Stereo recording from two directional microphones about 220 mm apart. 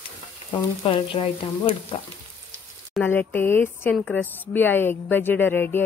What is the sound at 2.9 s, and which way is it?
A woman's voice, 10° left (ahead or behind).